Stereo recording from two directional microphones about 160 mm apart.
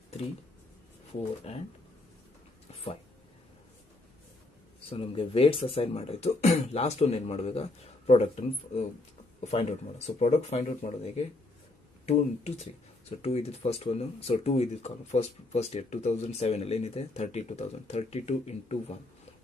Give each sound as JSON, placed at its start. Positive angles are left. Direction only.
{"t": 1.5, "sound": "speech", "side_deg": 40}
{"t": 2.7, "sound": "a sound", "side_deg": 40}
{"t": 4.8, "sound": "speech", "side_deg": 35}
{"t": 12.1, "sound": "speech", "side_deg": 40}